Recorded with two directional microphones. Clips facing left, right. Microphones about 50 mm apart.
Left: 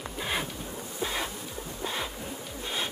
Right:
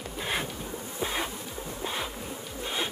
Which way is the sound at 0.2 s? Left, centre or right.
Centre.